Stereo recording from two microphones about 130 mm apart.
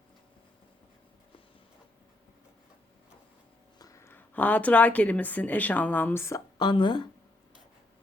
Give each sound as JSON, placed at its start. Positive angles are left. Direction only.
{"t": 3.8, "sound": "a woman's voice", "side_deg": 25}
{"t": 6.6, "sound": "speech", "side_deg": 35}